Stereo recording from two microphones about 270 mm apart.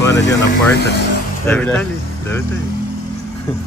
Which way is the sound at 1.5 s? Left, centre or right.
Centre.